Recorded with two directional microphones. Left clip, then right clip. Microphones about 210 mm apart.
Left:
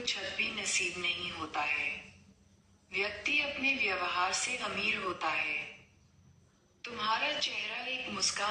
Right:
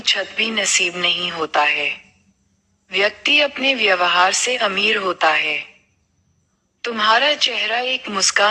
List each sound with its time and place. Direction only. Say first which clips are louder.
0.0 s a woman's voice: right 15 dB; 45° right (ahead or behind)
2.9 s a woman's voice: right 16 dB; 45° right (ahead or behind)
6.8 s a woman's voice: right 17 dB; 45° right (ahead or behind)